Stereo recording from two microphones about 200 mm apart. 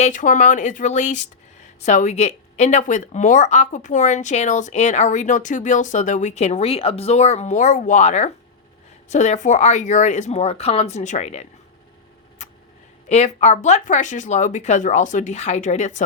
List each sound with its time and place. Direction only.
0.0 s speech: 40° left (ahead or behind)
12.4 s vehicle: 35° left (ahead or behind)
13.1 s speech: 35° left (ahead or behind)